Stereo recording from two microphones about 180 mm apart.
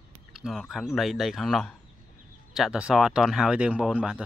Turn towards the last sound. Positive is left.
turn(degrees=-5)  # may be behind; listen again after turning